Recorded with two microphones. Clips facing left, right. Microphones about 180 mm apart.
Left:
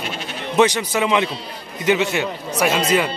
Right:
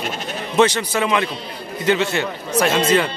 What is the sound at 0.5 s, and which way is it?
Speech, 15° left (ahead or behind).